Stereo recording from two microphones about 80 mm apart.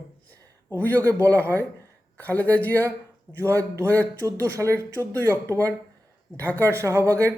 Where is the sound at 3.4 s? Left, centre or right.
Right.